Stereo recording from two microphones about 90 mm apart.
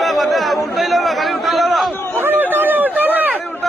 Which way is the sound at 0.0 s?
Centre (ahead or behind).